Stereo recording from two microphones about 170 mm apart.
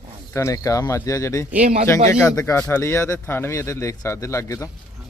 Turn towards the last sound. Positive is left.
turn(degrees=15)  # may be behind; listen again after turning